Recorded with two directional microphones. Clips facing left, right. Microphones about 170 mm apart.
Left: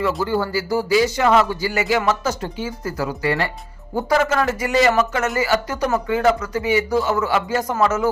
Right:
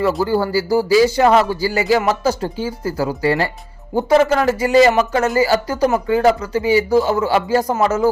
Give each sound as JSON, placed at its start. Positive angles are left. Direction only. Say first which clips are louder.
{"t": 0.3, "sound": "speech", "louder": "right 4 dB", "side_deg": -35}